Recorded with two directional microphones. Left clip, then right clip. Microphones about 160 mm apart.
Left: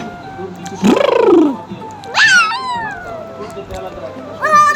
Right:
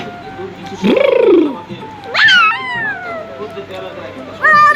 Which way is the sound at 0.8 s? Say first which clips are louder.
Right 1 dB; 65° left (ahead or behind).